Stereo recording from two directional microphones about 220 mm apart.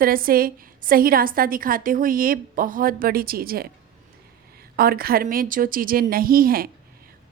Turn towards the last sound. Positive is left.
turn(degrees=-40)  # may be behind; listen again after turning